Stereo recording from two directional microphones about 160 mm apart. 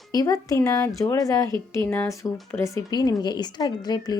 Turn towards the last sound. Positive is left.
turn(degrees=25)  # may be behind; listen again after turning